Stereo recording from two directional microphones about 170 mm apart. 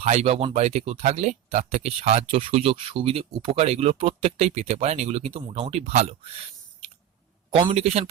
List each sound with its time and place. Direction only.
0.0 s speech: 40° right (ahead or behind)
7.5 s speech: 35° right (ahead or behind)